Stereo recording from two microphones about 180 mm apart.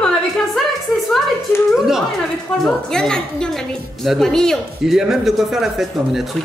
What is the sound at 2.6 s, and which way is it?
A woman's voice, 5° left (ahead or behind).